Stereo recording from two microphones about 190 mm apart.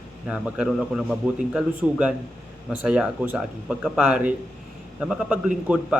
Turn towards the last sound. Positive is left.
turn(degrees=-5)  # may be behind; listen again after turning